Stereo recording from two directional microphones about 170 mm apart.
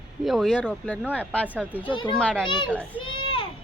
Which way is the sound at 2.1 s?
5° left (ahead or behind).